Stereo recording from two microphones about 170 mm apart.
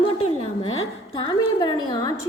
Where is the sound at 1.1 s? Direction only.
30° left (ahead or behind).